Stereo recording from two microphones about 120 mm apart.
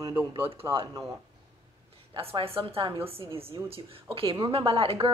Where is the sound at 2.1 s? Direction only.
50° right (ahead or behind).